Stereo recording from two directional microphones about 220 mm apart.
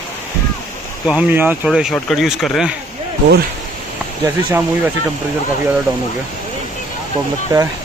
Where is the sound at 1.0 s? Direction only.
10° right (ahead or behind).